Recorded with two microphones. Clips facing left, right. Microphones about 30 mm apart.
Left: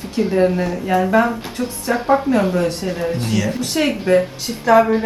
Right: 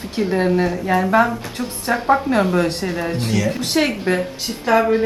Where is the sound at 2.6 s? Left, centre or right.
Right.